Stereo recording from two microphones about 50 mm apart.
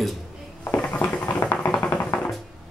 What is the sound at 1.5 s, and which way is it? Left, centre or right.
Music, centre.